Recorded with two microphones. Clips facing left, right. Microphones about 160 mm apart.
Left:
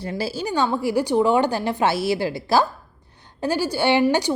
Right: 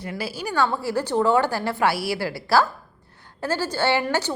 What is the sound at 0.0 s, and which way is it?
A woman's voice, 30° left (ahead or behind).